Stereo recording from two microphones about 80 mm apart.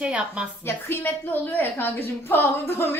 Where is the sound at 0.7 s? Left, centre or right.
Left.